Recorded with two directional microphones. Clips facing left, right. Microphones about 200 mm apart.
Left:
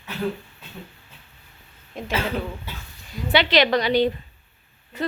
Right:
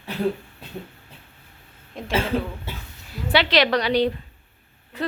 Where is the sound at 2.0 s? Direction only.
Centre (ahead or behind).